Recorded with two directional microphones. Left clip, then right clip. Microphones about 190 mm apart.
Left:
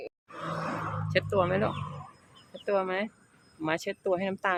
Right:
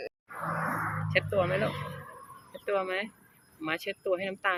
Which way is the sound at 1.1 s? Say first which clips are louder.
Left 1 dB; 25° left (ahead or behind).